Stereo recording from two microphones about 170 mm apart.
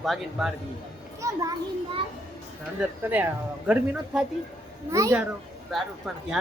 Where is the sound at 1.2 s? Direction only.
20° right (ahead or behind).